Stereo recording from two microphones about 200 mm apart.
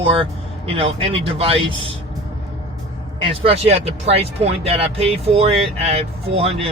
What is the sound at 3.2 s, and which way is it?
Speech, 30° right (ahead or behind).